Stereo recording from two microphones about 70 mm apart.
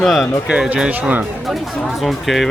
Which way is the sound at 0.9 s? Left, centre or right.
Right.